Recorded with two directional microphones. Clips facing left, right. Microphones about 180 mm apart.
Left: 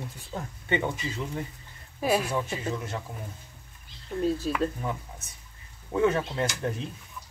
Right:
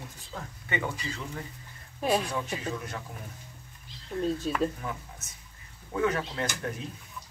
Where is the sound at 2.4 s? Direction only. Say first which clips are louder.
Left 2 dB; 25° left (ahead or behind).